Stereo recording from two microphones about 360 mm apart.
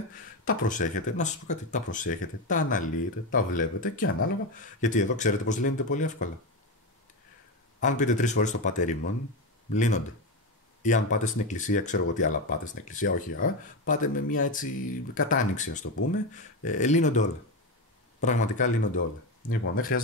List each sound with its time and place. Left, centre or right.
0.5 s speech: left
7.8 s speech: left